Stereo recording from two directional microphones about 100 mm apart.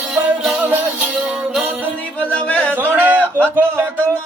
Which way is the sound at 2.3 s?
15° left (ahead or behind).